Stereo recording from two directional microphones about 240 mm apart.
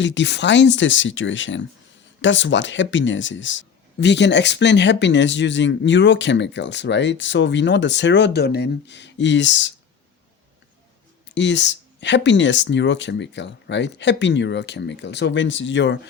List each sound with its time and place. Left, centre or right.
0.0 s speech: left
11.3 s speech: left